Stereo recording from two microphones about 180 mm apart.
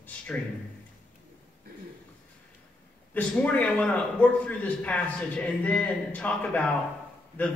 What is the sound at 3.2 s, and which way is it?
A man's voice, 10° left (ahead or behind).